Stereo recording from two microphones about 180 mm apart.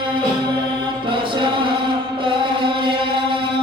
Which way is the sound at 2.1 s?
30° right (ahead or behind).